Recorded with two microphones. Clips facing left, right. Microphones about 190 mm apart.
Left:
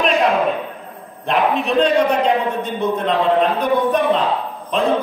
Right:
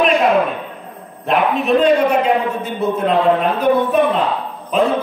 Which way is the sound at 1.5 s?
Centre (ahead or behind).